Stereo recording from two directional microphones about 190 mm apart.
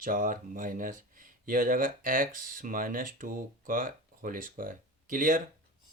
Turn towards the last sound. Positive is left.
turn(degrees=-45)  # may be behind; listen again after turning